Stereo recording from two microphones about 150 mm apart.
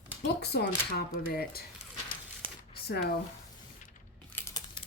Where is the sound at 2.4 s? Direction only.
35° right (ahead or behind).